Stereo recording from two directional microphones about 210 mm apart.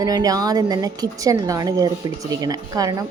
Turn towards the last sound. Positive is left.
turn(degrees=-15)  # may be behind; listen again after turning